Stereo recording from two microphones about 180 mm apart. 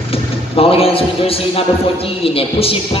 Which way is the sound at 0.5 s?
30° left (ahead or behind).